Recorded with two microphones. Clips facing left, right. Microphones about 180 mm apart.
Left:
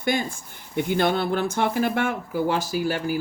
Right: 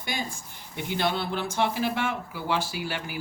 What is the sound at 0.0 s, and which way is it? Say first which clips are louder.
Speech: left 8 dB; 55° left (ahead or behind).